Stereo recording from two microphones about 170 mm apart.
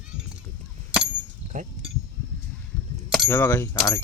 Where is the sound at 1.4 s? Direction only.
10° right (ahead or behind).